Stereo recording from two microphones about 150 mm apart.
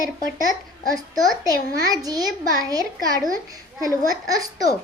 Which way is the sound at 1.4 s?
25° right (ahead or behind).